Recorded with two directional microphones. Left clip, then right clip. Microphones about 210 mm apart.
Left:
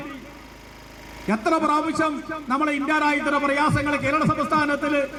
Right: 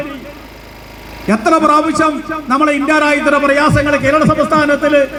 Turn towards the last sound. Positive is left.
turn(degrees=40)  # may be behind; listen again after turning